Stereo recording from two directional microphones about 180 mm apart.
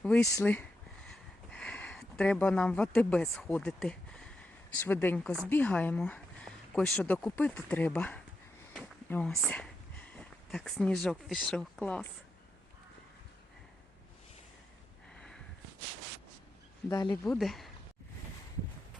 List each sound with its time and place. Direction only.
0.0 s speech: 5° left (ahead or behind)
15.1 s sniff: 5° left (ahead or behind)
16.9 s speech: 20° left (ahead or behind)
17.2 s speech: centre (ahead or behind)